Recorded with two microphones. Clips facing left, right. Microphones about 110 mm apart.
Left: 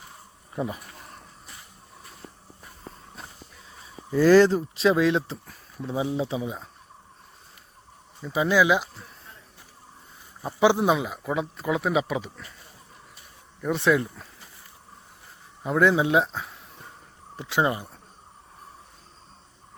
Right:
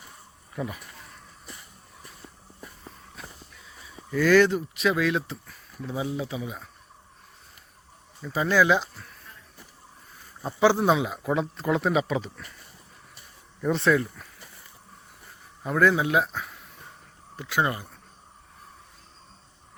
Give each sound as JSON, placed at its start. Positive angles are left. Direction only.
{"t": 0.5, "sound": "speech", "side_deg": 25}
{"t": 4.1, "sound": "speech", "side_deg": 30}
{"t": 8.2, "sound": "speech", "side_deg": 15}
{"t": 10.4, "sound": "speech", "side_deg": 15}
{"t": 10.9, "sound": "speech", "side_deg": 0}
{"t": 13.6, "sound": "speech", "side_deg": 5}
{"t": 13.8, "sound": "speech", "side_deg": 20}
{"t": 15.6, "sound": "speech", "side_deg": 20}